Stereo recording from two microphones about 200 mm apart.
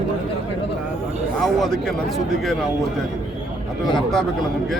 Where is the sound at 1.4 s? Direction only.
Centre (ahead or behind).